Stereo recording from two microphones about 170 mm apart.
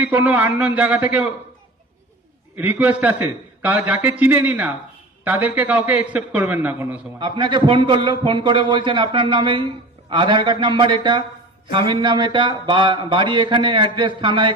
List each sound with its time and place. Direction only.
0.0 s a man's voice: 10° right (ahead or behind)
2.6 s a man's voice: 10° right (ahead or behind)
7.2 s speech: 30° right (ahead or behind)